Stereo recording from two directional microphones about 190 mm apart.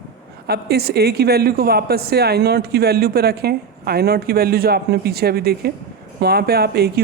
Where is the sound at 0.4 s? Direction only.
55° right (ahead or behind).